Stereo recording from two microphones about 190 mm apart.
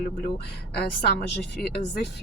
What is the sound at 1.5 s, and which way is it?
Speech, 60° left (ahead or behind).